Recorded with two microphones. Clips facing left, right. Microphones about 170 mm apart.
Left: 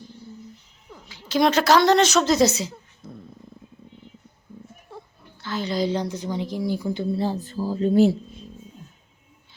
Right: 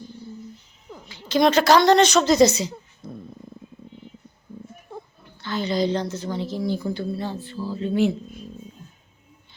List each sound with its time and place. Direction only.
1.0 s a woman's voice: 5° left (ahead or behind)
5.4 s a woman's voice: centre (ahead or behind)
7.0 s a woman's voice: 30° left (ahead or behind)